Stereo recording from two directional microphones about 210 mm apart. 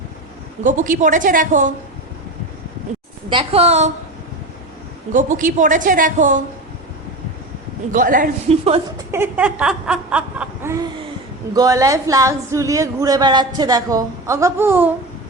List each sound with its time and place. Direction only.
0.6 s a woman's voice: 40° right (ahead or behind)
3.2 s a woman's voice: 25° right (ahead or behind)
5.1 s a woman's voice: 40° right (ahead or behind)
7.9 s a woman's voice: 40° right (ahead or behind)
9.1 s speech: 10° right (ahead or behind)